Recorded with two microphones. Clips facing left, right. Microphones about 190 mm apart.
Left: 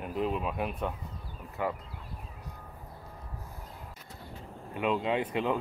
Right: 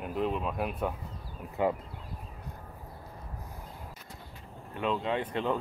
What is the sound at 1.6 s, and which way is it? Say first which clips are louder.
Speech: right 4 dB; 20° right (ahead or behind).